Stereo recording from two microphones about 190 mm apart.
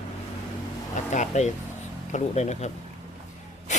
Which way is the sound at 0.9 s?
40° left (ahead or behind).